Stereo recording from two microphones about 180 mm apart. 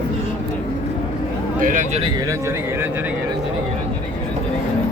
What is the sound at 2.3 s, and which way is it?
Speech, 15° right (ahead or behind).